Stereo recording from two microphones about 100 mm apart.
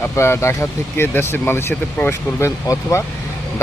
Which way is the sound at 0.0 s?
25° left (ahead or behind).